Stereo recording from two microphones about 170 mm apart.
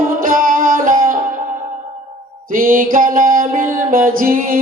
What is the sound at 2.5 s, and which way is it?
Mantra, 55° right (ahead or behind).